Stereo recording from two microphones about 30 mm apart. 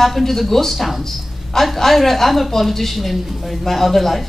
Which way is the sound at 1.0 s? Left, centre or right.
Centre.